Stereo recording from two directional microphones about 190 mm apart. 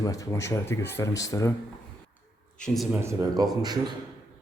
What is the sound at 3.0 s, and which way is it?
Speech, 15° right (ahead or behind).